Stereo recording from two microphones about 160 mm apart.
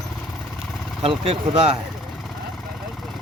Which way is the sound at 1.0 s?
35° right (ahead or behind).